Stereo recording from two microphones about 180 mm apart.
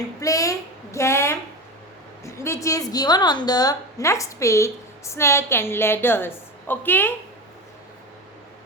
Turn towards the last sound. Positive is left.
turn(degrees=10)  # may be behind; listen again after turning